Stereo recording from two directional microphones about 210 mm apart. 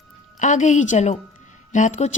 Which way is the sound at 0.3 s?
35° left (ahead or behind).